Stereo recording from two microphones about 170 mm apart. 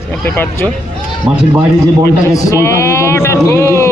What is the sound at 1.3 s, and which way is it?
Speech, 5° right (ahead or behind).